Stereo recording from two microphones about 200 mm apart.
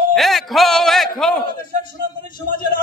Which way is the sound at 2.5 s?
45° left (ahead or behind).